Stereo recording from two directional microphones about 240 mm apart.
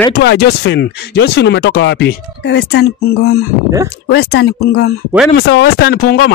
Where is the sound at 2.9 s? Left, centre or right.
Left.